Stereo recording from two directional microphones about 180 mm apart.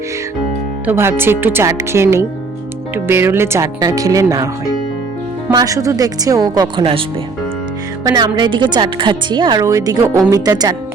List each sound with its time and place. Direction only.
0.9 s speech: 15° right (ahead or behind)
5.5 s speech: 20° right (ahead or behind)
8.0 s speech: 20° right (ahead or behind)